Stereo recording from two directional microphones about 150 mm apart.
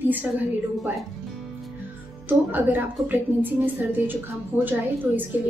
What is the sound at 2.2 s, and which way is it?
A woman's voice, 10° right (ahead or behind).